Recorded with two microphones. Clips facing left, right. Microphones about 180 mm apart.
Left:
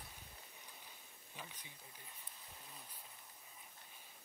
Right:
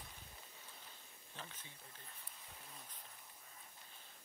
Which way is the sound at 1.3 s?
10° left (ahead or behind).